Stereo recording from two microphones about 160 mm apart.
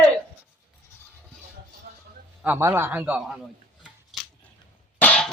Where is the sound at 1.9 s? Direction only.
65° right (ahead or behind).